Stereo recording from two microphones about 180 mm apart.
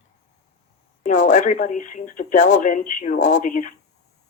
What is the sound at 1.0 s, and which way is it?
Speech, 45° left (ahead or behind).